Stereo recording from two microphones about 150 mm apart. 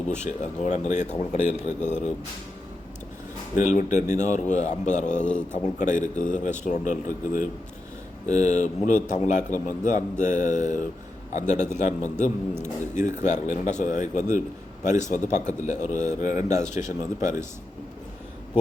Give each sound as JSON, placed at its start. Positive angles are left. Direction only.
{"t": 0.2, "sound": "speech", "side_deg": 50}
{"t": 3.6, "sound": "a man's voice", "side_deg": 50}
{"t": 8.3, "sound": "a man's voice", "side_deg": 50}